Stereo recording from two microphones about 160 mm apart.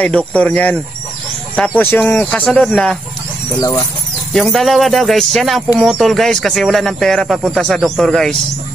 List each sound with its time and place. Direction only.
0.0 s speech: 5° left (ahead or behind)
1.8 s speech: 10° left (ahead or behind)
3.5 s speech: 20° left (ahead or behind)
4.3 s speech: centre (ahead or behind)